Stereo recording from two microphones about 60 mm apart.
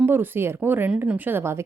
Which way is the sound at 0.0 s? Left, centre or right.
Right.